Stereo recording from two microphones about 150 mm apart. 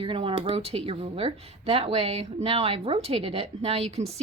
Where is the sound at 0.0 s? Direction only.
35° right (ahead or behind).